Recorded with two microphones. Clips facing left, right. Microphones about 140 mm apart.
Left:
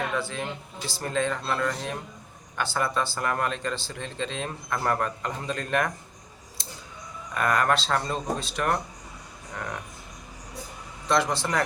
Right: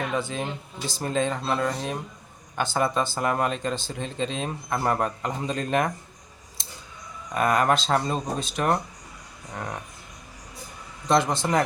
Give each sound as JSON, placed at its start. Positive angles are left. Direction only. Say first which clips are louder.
{"t": 0.2, "sound": "speech", "louder": "right 2 dB", "side_deg": -20}
{"t": 7.3, "sound": "speech", "louder": "right 2 dB", "side_deg": -20}
{"t": 11.1, "sound": "speech", "louder": "right 3 dB", "side_deg": -20}